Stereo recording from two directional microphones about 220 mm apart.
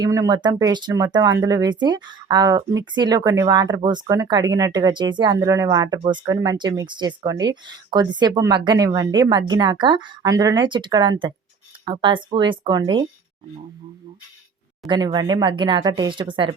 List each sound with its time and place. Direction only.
0.0 s speech: 15° right (ahead or behind)
14.8 s speech: 20° right (ahead or behind)